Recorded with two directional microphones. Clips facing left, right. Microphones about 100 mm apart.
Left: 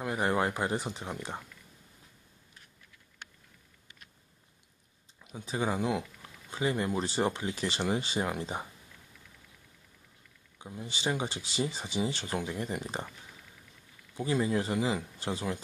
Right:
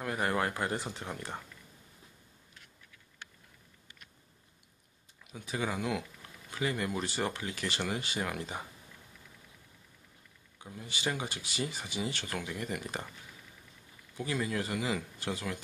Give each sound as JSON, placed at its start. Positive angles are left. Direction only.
{"t": 0.0, "sound": "speech", "side_deg": 20}
{"t": 5.3, "sound": "speech", "side_deg": 25}
{"t": 10.6, "sound": "speech", "side_deg": 20}
{"t": 14.1, "sound": "speech", "side_deg": 25}